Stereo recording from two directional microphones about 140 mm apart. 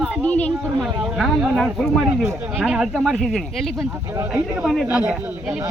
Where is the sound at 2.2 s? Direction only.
20° right (ahead or behind).